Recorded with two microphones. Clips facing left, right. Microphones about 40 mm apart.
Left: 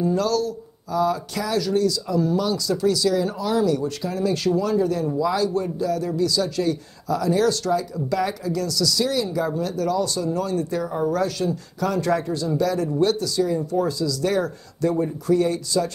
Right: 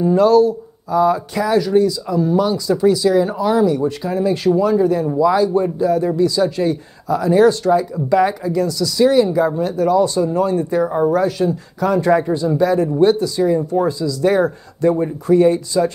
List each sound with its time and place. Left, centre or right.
0.0 s speech: right